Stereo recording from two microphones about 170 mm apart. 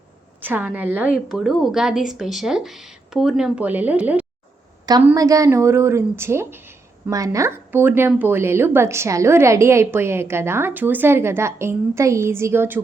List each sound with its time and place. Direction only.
0.4 s a woman's voice: 10° right (ahead or behind)
5.0 s speech: 20° right (ahead or behind)